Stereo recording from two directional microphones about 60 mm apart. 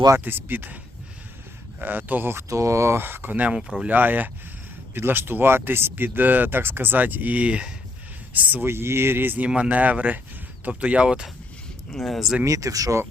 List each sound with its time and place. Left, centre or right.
0.3 s speech: right
1.8 s speech: right
2.5 s speech: right
3.0 s speech: right
3.6 s speech: centre
3.8 s speech: right
8.6 s speech: right; by 11.3 s centre
11.9 s speech: centre
12.5 s speech: right